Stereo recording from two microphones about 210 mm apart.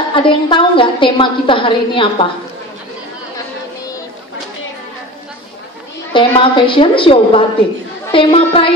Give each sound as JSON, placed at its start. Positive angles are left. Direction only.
{"t": 0.1, "sound": "a woman's voice", "side_deg": 25}
{"t": 6.1, "sound": "a woman's voice", "side_deg": 25}